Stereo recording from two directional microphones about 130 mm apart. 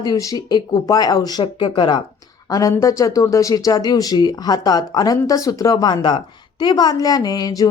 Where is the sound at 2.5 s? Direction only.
25° left (ahead or behind).